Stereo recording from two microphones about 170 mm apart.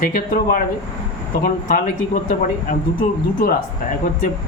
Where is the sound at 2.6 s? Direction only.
55° left (ahead or behind).